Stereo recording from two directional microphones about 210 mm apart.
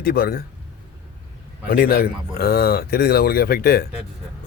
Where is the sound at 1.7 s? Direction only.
45° left (ahead or behind).